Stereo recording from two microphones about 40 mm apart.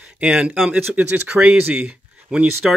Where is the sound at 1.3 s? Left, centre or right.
Right.